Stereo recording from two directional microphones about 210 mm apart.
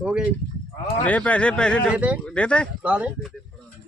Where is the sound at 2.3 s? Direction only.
5° left (ahead or behind).